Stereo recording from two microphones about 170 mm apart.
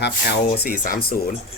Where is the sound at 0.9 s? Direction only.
60° left (ahead or behind).